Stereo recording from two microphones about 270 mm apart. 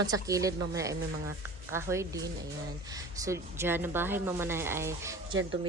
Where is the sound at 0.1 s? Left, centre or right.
Centre.